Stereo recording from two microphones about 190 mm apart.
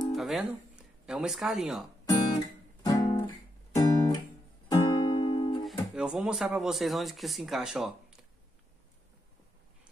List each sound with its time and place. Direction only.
0.0 s music: centre (ahead or behind)
1.0 s speech: 5° right (ahead or behind)
2.8 s guitar: 20° left (ahead or behind)
4.6 s music: 20° left (ahead or behind)
5.6 s speech: centre (ahead or behind)